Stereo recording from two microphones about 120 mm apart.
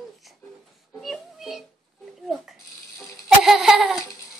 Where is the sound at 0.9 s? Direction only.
Centre (ahead or behind).